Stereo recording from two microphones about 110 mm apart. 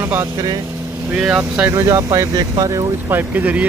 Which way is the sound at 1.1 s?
10° right (ahead or behind).